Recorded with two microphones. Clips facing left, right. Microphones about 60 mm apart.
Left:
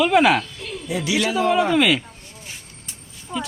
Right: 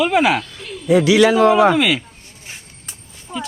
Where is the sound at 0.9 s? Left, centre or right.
Right.